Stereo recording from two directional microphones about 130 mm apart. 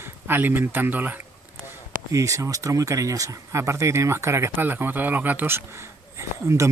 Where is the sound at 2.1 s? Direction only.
25° right (ahead or behind).